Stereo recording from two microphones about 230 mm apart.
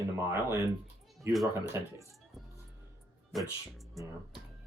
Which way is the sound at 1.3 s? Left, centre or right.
Centre.